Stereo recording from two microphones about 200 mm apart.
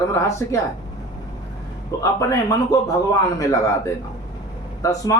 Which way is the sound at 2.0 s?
15° left (ahead or behind).